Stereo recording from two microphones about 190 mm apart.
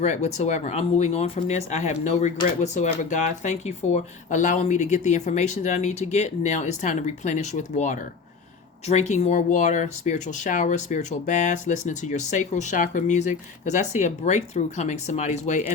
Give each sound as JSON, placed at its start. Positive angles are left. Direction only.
{"t": 0.0, "sound": "speech", "side_deg": 35}